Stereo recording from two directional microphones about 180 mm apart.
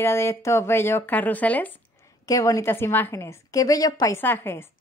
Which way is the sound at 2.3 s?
20° left (ahead or behind).